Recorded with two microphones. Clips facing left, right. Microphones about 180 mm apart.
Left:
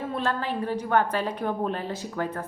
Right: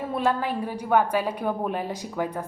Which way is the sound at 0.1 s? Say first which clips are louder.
Right 5 dB; 10° right (ahead or behind).